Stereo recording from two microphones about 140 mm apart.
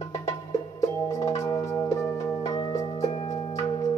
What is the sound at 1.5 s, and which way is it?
Music, 20° left (ahead or behind).